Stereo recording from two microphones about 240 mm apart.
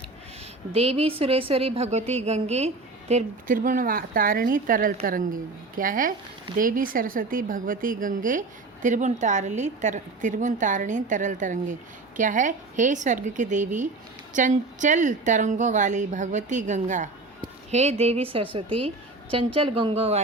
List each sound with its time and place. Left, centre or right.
0.7 s a woman's voice: right